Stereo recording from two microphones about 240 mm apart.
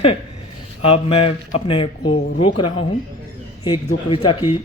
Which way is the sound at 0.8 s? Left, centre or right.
Left.